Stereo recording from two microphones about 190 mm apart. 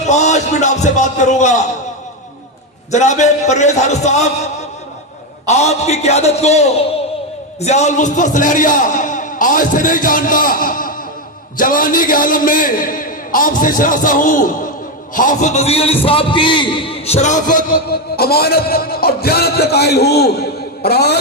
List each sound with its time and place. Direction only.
0.1 s speech: 35° left (ahead or behind)
2.9 s speech: 40° left (ahead or behind)
5.5 s a man's voice: 35° left (ahead or behind); by 21.2 s 60° left (ahead or behind)